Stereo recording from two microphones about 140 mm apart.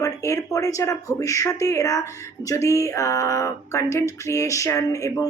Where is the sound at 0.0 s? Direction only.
20° left (ahead or behind).